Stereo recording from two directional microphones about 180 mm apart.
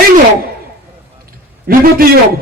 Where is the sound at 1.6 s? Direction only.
55° right (ahead or behind).